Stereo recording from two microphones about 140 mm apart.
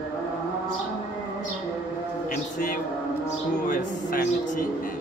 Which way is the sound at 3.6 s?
80° left.